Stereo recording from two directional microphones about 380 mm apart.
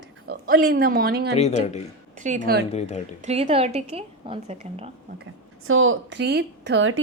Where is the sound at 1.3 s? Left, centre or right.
Centre.